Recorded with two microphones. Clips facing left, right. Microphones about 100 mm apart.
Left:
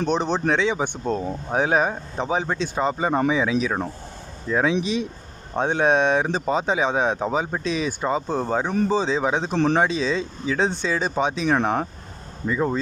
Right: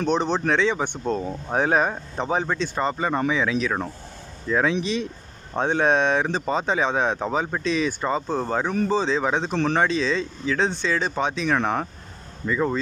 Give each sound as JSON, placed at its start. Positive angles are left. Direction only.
{"t": 0.0, "sound": "speech", "side_deg": 0}
{"t": 9.5, "sound": "speech", "side_deg": 30}
{"t": 9.7, "sound": "speech", "side_deg": 10}